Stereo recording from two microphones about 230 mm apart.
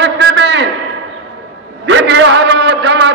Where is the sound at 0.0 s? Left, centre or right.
Right.